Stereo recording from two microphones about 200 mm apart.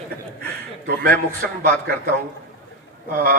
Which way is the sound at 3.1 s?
50° right (ahead or behind).